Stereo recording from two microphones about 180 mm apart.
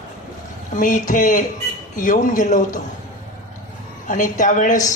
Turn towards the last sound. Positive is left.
turn(degrees=45)  # may be behind; listen again after turning